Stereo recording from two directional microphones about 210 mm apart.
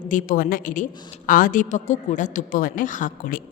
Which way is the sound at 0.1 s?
40° left (ahead or behind).